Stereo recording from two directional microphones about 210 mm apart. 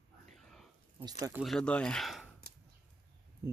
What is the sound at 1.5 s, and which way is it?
Speech, 5° left (ahead or behind).